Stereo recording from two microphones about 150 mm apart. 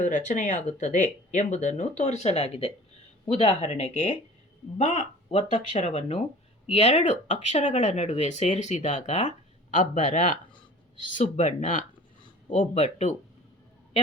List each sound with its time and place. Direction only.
0.0 s speech: 55° left (ahead or behind)